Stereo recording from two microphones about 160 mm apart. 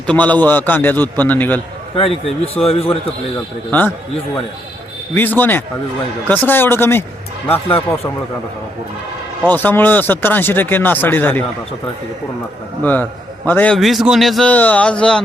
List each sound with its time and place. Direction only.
0.1 s a man's voice: 10° left (ahead or behind)
2.0 s a man's voice: 35° left (ahead or behind)
3.7 s a man's voice: 10° left (ahead or behind)
5.1 s a man's voice: 10° left (ahead or behind)
9.5 s a man's voice: 10° left (ahead or behind)
12.8 s a man's voice: 10° left (ahead or behind)